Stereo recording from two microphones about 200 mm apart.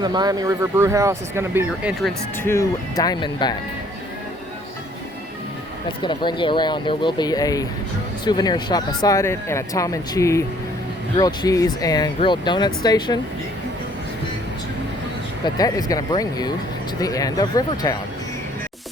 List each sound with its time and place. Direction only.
0.0 s speech: 20° right (ahead or behind); by 2.1 s centre (ahead or behind)
2.4 s speech: 15° left (ahead or behind)
6.0 s speech: 25° left (ahead or behind)
15.4 s speech: 20° left (ahead or behind)